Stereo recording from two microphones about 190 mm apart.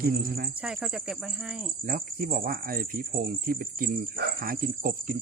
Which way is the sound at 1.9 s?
45° right (ahead or behind).